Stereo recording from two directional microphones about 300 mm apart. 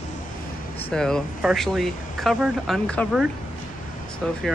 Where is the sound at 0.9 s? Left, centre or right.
Centre.